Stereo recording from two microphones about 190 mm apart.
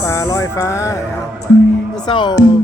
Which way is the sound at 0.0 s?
15° left (ahead or behind).